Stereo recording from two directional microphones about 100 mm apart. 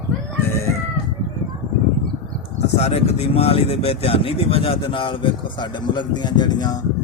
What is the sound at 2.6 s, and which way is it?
Speech, 90° left.